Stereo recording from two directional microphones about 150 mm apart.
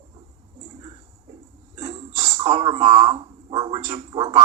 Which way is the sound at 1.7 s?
30° right (ahead or behind).